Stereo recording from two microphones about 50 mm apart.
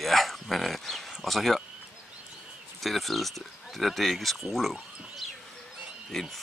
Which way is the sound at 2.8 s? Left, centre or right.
Centre.